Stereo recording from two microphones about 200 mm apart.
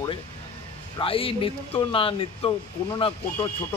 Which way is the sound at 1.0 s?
25° left (ahead or behind).